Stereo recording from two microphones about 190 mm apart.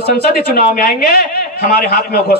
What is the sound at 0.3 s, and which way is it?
A man's voice, 50° left (ahead or behind).